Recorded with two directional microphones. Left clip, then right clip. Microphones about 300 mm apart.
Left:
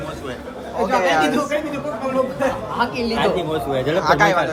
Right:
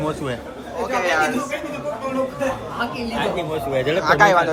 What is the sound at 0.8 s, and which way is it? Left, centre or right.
Speech, centre.